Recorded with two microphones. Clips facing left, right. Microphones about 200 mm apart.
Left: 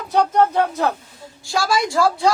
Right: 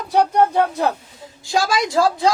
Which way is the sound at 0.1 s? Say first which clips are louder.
Right 1 dB; 15° right (ahead or behind).